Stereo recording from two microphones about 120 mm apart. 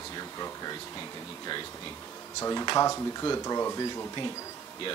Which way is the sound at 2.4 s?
25° left (ahead or behind).